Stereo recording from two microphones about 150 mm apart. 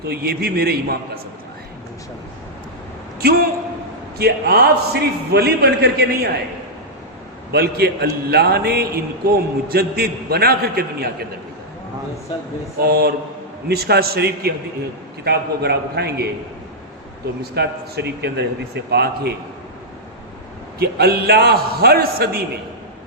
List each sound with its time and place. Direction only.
0.0 s a man's voice: 90° right
4.2 s a man's voice: 90° right
7.5 s a man's voice: 90° right
12.8 s a man's voice: 90° right
17.5 s a man's voice: 90° right
20.7 s a man's voice: 90° right